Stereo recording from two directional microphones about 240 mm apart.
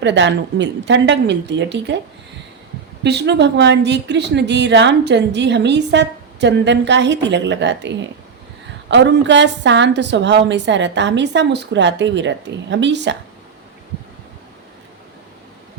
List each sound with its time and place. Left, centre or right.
0.0 s a woman's voice: right
3.0 s a woman's voice: right